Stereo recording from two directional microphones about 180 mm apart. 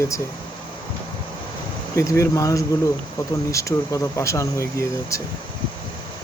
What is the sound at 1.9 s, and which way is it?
Speech, 15° left (ahead or behind).